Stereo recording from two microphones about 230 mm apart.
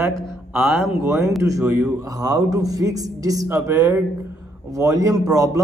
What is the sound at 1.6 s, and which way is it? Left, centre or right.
A man's voice, centre.